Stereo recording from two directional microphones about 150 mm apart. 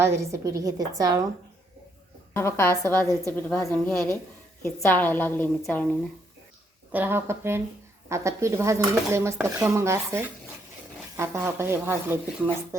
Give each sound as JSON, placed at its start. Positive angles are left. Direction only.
{"t": 0.0, "sound": "dishes", "side_deg": -20}
{"t": 2.3, "sound": "a woman's voice", "side_deg": 15}
{"t": 6.9, "sound": "speech", "side_deg": -15}
{"t": 8.1, "sound": "dishes", "side_deg": -20}
{"t": 11.2, "sound": "speech", "side_deg": -15}